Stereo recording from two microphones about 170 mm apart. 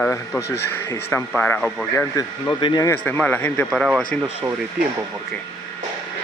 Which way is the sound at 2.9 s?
10° left (ahead or behind).